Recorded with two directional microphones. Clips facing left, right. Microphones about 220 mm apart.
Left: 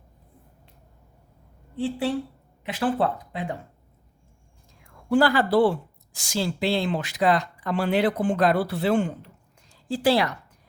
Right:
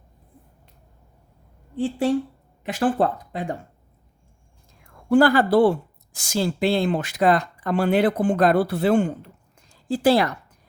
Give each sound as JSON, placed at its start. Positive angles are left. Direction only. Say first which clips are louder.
{"t": 1.7, "sound": "speech", "louder": "right 4 dB", "side_deg": -45}
{"t": 5.0, "sound": "speech", "louder": "right 4 dB", "side_deg": -55}